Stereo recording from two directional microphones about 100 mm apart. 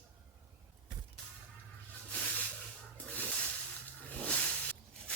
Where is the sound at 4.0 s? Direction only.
15° left (ahead or behind).